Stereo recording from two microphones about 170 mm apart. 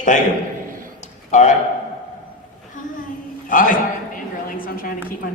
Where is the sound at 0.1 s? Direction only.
50° left (ahead or behind).